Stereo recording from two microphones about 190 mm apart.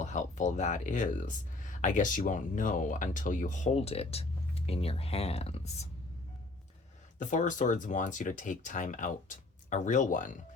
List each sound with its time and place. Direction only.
0.0 s speech: 40° left (ahead or behind)
7.2 s speech: 40° left (ahead or behind)